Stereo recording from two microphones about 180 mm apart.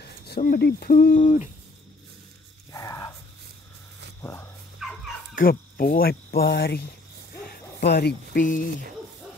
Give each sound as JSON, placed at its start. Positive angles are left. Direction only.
{"t": 0.4, "sound": "speech", "side_deg": 55}
{"t": 2.7, "sound": "a sound", "side_deg": 15}
{"t": 4.2, "sound": "speech", "side_deg": 15}
{"t": 4.7, "sound": "dog", "side_deg": 0}
{"t": 5.3, "sound": "speech", "side_deg": 55}